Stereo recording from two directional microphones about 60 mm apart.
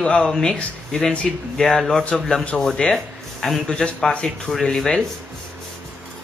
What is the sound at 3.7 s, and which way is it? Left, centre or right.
Speech, centre.